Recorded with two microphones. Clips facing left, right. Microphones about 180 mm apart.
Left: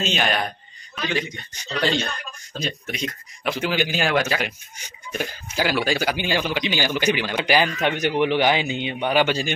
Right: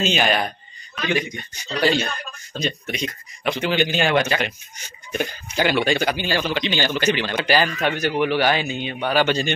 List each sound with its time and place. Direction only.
0.0 s speech: centre (ahead or behind)
1.0 s a man's voice: 15° right (ahead or behind)
2.6 s speech: 5° left (ahead or behind)
6.1 s a man's voice: 15° left (ahead or behind)